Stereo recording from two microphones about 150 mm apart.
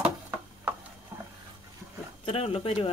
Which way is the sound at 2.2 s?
40° left (ahead or behind).